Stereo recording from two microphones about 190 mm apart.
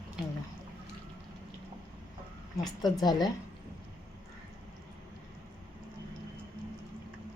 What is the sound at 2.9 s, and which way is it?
Speech, 20° left (ahead or behind).